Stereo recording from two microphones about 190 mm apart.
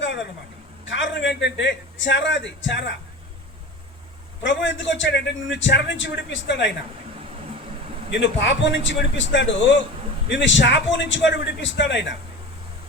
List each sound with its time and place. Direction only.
0.9 s a man's voice: 70° left (ahead or behind)
4.4 s a man's voice: 75° left (ahead or behind)
7.3 s vehicle: 30° right (ahead or behind)
8.1 s a man's voice: 70° left (ahead or behind)